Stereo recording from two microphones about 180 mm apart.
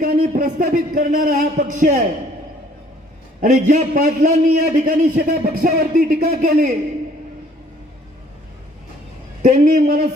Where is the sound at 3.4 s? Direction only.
50° right (ahead or behind).